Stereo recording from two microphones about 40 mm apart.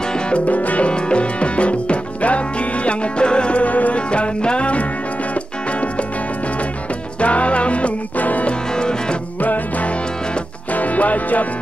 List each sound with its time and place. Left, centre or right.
0.5 s music: left
0.8 s music: left
4.1 s music: left
7.2 s music: left
8.5 s music: left
9.4 s music: left